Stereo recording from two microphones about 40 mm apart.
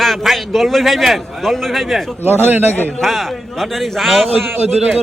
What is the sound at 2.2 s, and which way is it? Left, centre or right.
Speech, right.